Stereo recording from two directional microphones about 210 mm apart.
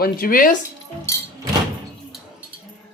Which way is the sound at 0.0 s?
45° left (ahead or behind).